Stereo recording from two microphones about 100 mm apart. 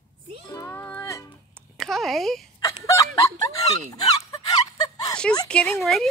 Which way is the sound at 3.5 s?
35° left (ahead or behind).